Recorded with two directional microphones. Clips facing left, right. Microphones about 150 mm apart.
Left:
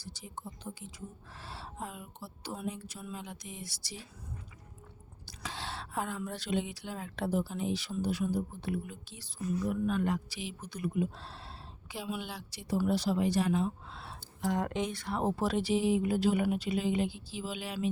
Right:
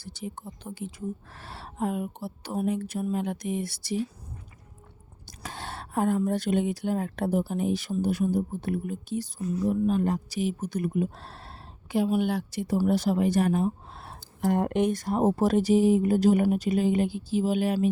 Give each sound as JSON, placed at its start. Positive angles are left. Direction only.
{"t": 0.0, "sound": "speech", "side_deg": -60}
{"t": 5.2, "sound": "speech", "side_deg": -50}
{"t": 9.5, "sound": "speech", "side_deg": -35}